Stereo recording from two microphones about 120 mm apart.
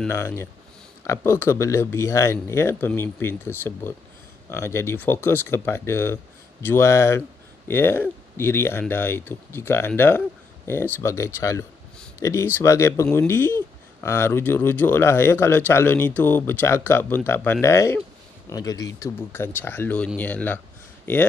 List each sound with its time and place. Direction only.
1.0 s speech: 20° left (ahead or behind)